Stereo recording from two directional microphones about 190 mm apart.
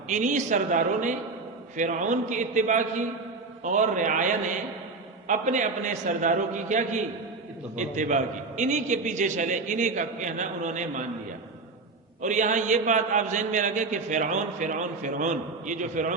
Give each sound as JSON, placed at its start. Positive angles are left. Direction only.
{"t": 0.1, "sound": "a man's voice", "side_deg": -40}
{"t": 12.2, "sound": "a man's voice", "side_deg": -40}